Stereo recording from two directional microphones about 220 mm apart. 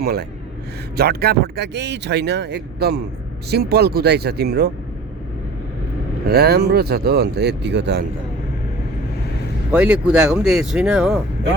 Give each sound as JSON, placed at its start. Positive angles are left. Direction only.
{"t": 0.0, "sound": "speech", "side_deg": -45}
{"t": 6.2, "sound": "speech", "side_deg": -45}
{"t": 9.7, "sound": "speech", "side_deg": -5}